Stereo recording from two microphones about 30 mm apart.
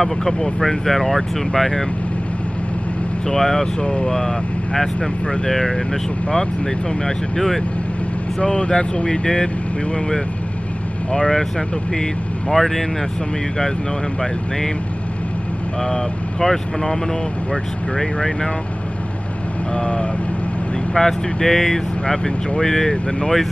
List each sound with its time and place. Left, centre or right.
0.2 s speech: centre
0.6 s speech: centre
3.3 s speech: centre
3.8 s speech: left
5.5 s speech: centre
8.4 s speech: left
12.4 s speech: centre
15.8 s speech: centre
19.7 s speech: left
20.9 s speech: left
21.5 s speech: centre
22.0 s speech: left